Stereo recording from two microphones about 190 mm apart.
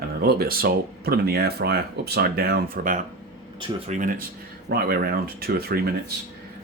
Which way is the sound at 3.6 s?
30° right (ahead or behind).